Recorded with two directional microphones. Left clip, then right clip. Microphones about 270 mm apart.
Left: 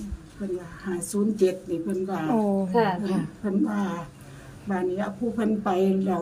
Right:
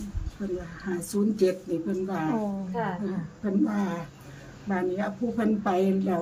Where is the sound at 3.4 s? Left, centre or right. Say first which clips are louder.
Right 1 dB; centre.